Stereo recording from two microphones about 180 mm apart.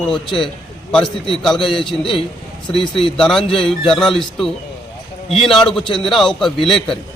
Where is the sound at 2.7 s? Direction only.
30° left (ahead or behind).